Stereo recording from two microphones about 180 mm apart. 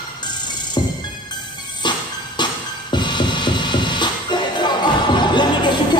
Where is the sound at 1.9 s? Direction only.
25° left (ahead or behind).